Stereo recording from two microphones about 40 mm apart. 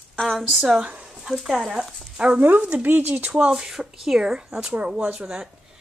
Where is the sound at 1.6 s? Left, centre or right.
Right.